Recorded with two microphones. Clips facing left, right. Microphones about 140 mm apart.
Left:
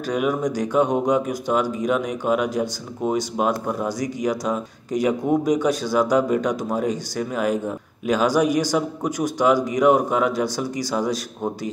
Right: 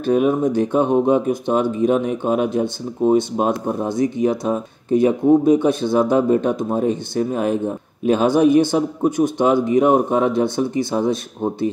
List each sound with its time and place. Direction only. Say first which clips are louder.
0.0 s speech: right 6 dB; 30° right (ahead or behind)